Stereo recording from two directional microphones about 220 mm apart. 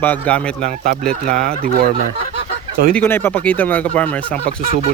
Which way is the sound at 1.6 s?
40° right (ahead or behind).